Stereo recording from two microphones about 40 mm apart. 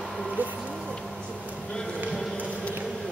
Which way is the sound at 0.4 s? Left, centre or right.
Right.